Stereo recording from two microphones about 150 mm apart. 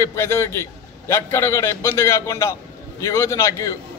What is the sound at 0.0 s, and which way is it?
A man's voice, 20° left (ahead or behind).